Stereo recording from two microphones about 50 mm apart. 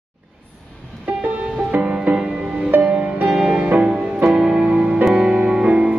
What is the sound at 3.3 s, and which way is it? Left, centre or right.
Music, centre.